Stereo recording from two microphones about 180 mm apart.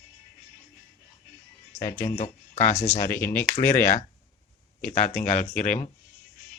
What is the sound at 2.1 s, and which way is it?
Speech, 40° left (ahead or behind).